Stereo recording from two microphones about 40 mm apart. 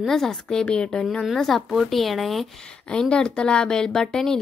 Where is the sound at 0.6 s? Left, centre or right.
Left; by 2.6 s centre.